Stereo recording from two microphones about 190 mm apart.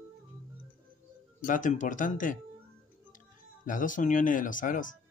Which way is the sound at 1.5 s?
45° left (ahead or behind).